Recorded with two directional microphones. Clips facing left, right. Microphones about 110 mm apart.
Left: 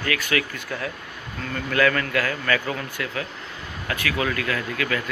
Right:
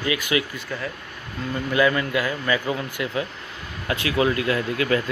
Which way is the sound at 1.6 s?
15° right (ahead or behind).